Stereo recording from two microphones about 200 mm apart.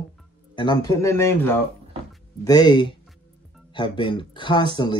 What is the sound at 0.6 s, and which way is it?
Speech, 20° left (ahead or behind).